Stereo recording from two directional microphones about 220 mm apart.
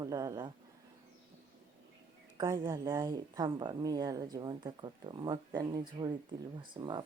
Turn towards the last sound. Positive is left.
turn(degrees=-20)  # may be behind; listen again after turning